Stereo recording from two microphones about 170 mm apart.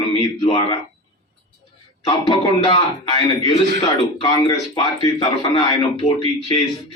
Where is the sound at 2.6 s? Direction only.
25° left (ahead or behind).